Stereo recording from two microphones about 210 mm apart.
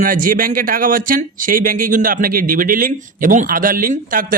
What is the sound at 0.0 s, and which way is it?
Speech, 40° right (ahead or behind).